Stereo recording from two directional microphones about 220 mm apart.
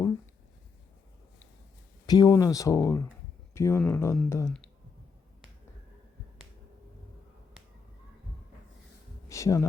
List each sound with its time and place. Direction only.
2.0 s speech: 15° left (ahead or behind)
9.3 s speech: 15° left (ahead or behind)